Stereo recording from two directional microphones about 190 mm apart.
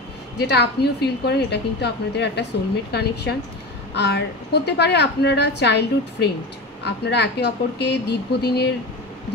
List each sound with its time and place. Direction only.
0.4 s a woman's voice: 60° left (ahead or behind)